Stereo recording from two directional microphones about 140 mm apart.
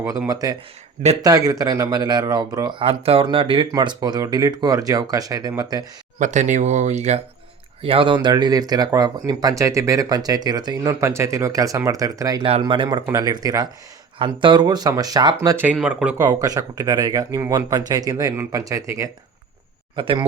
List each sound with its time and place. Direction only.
0.3 s speech: 25° right (ahead or behind)
2.7 s speech: 45° right (ahead or behind); by 5.8 s 25° right (ahead or behind)
6.1 s speech: 60° right (ahead or behind)
7.8 s speech: 40° right (ahead or behind)
12.5 s speech: 40° right (ahead or behind)
15.4 s speech: 15° right (ahead or behind)
16.1 s speech: 25° right (ahead or behind)
20.0 s speech: 35° right (ahead or behind)